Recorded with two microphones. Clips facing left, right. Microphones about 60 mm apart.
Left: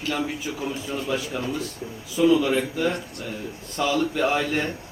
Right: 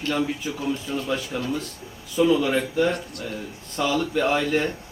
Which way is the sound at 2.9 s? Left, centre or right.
Left.